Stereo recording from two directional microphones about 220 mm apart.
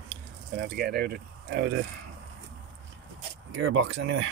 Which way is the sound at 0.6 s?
45° right (ahead or behind).